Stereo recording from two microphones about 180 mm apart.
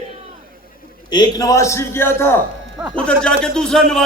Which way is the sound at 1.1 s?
20° left (ahead or behind).